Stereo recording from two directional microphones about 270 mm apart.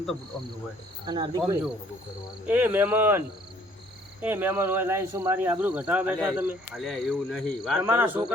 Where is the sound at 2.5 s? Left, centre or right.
Centre.